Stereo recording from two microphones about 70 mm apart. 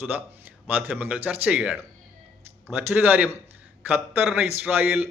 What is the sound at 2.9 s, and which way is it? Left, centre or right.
A man's voice, right.